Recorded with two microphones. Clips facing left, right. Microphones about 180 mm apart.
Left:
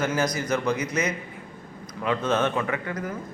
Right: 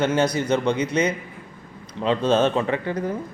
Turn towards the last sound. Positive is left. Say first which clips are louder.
# right 5 dB
turn(degrees=-30)  # may be behind; listen again after turning